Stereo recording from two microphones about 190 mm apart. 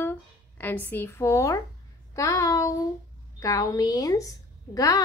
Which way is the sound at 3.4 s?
15° left (ahead or behind).